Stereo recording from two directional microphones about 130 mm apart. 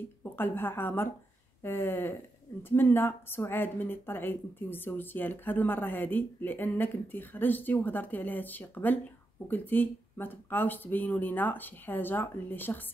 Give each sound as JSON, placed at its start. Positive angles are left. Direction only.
{"t": 0.2, "sound": "a woman's voice", "side_deg": 15}